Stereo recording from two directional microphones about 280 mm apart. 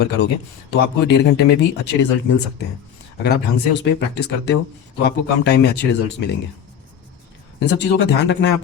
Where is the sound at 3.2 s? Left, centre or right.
Left.